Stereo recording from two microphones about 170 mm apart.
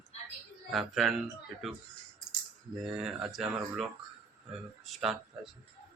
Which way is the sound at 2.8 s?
Centre (ahead or behind).